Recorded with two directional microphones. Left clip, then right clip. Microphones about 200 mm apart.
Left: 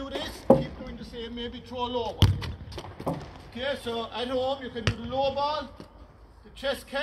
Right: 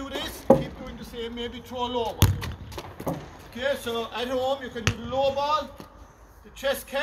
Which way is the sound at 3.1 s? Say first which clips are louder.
Even; 30° left (ahead or behind).